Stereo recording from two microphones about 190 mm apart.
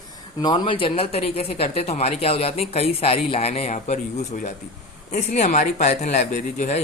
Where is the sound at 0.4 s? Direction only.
25° left (ahead or behind).